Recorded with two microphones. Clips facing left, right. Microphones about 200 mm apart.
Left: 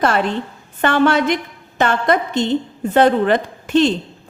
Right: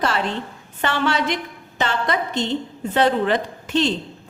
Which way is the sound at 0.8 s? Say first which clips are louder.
Left 7 dB; 50° left (ahead or behind).